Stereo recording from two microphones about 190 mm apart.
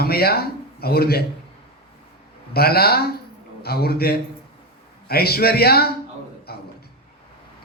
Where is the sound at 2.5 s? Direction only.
55° left (ahead or behind).